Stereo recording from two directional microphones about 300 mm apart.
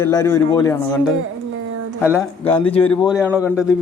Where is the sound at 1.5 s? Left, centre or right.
Right.